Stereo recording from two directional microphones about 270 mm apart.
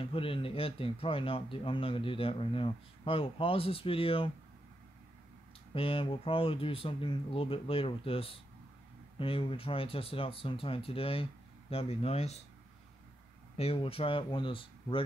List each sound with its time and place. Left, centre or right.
0.0 s speech: centre
5.8 s speech: centre
13.6 s speech: left